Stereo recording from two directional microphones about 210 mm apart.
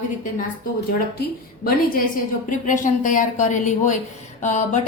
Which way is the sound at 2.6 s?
40° left (ahead or behind).